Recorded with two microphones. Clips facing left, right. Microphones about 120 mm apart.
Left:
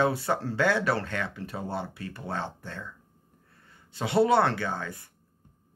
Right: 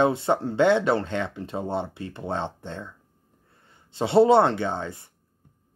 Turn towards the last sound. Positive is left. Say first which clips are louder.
# right 4 dB
turn(degrees=-25)  # may be behind; listen again after turning